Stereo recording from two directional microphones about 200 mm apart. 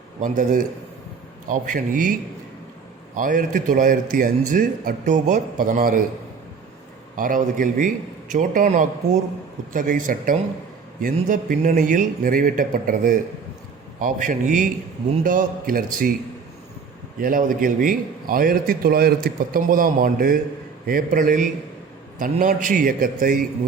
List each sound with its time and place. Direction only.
0.2 s a man's voice: 40° right (ahead or behind)
3.2 s a man's voice: 40° right (ahead or behind)
7.2 s a man's voice: 40° right (ahead or behind)
17.2 s a man's voice: 45° right (ahead or behind)